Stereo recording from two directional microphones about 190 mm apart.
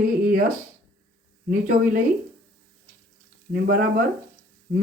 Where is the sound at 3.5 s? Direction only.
50° right (ahead or behind).